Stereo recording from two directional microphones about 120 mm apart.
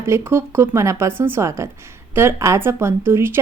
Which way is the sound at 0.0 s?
20° right (ahead or behind).